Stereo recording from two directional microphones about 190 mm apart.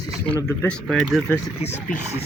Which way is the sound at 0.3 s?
10° left (ahead or behind).